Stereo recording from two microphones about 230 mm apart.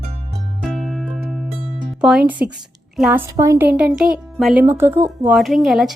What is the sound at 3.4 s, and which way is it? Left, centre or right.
Speech, centre.